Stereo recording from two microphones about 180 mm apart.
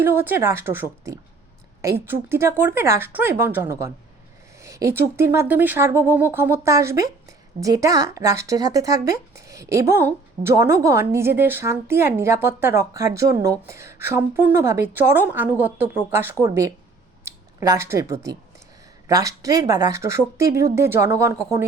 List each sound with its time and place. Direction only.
0.0 s a woman's voice: 10° right (ahead or behind)
17.2 s a sound: 15° right (ahead or behind)
18.0 s a woman's voice: 15° right (ahead or behind)